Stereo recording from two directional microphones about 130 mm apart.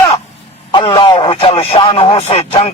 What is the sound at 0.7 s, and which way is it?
Speech, 40° left (ahead or behind).